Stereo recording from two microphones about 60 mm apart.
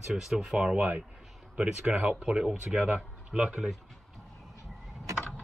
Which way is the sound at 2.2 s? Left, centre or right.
Centre.